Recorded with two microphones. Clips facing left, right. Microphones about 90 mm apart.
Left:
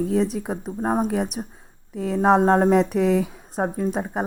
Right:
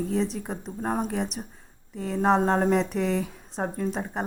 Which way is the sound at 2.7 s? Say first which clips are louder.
Left 6 dB; 55° left (ahead or behind).